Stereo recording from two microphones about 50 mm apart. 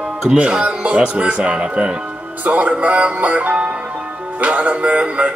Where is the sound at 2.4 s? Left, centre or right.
Right.